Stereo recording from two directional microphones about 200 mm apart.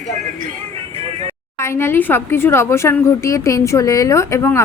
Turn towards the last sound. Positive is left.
turn(degrees=15)  # may be behind; listen again after turning